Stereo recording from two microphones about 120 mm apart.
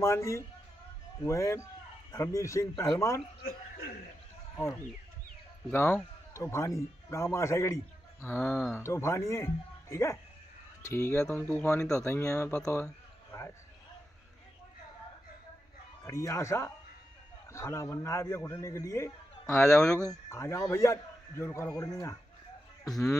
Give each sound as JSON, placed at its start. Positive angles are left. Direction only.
{"t": 0.0, "sound": "a man's voice", "side_deg": 25}
{"t": 4.6, "sound": "a man's voice", "side_deg": 20}
{"t": 12.0, "sound": "a man's voice", "side_deg": 25}
{"t": 12.6, "sound": "a sound", "side_deg": 25}
{"t": 16.0, "sound": "a man's voice", "side_deg": 25}
{"t": 19.6, "sound": "speech", "side_deg": 5}
{"t": 20.1, "sound": "a man's voice", "side_deg": 25}